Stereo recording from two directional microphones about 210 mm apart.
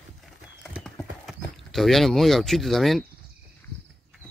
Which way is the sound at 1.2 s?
Centre (ahead or behind).